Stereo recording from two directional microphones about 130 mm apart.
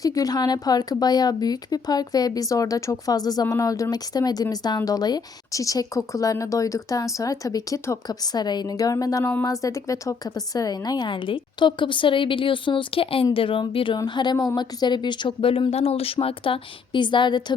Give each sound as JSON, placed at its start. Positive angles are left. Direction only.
{"t": 0.0, "sound": "speech", "side_deg": 25}